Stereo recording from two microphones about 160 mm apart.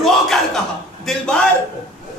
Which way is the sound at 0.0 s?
Centre (ahead or behind).